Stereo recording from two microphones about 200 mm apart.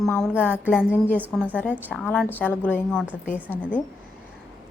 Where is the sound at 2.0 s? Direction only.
10° left (ahead or behind).